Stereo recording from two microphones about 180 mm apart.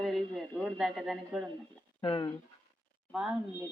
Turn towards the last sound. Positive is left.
turn(degrees=-5)  # may be behind; listen again after turning